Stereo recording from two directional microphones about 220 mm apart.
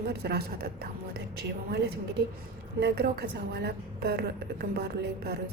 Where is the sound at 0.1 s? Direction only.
45° right (ahead or behind).